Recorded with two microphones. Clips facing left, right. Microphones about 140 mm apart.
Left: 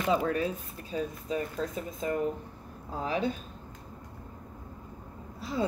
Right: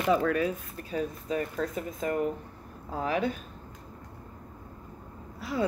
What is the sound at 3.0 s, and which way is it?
Speech, 30° left (ahead or behind).